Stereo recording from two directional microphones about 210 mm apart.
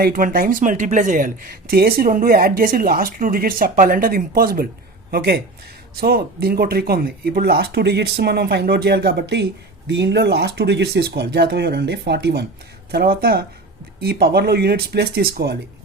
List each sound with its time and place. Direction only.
0.0 s speech: 40° right (ahead or behind)